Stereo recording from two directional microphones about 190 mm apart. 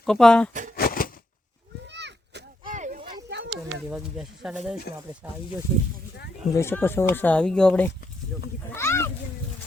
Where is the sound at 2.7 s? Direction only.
45° right (ahead or behind).